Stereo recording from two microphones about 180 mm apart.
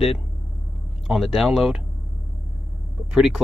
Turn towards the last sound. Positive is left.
turn(degrees=-5)  # may be behind; listen again after turning